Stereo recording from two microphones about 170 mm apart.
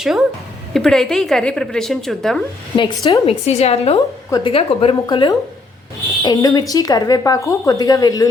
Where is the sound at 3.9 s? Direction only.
25° left (ahead or behind).